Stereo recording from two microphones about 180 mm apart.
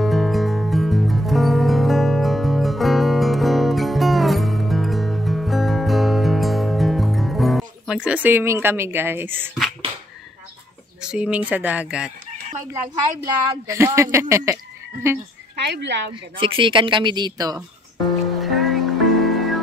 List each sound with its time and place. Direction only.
0.0 s music: centre (ahead or behind)
11.0 s speech: 5° right (ahead or behind)
13.2 s speech: 15° right (ahead or behind)
15.6 s speech: 70° right (ahead or behind)
16.3 s speech: 30° right (ahead or behind)
18.3 s music: centre (ahead or behind)